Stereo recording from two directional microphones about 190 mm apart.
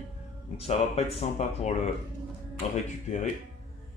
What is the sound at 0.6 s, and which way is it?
Speech, 35° left (ahead or behind).